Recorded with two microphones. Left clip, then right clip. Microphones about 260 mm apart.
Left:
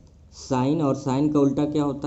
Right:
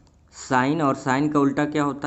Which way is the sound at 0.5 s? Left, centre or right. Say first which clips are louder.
Right 3 dB; centre.